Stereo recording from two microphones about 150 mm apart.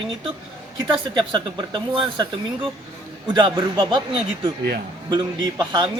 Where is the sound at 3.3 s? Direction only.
30° right (ahead or behind).